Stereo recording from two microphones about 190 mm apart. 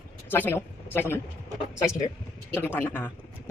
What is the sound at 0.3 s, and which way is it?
Speech, 10° left (ahead or behind).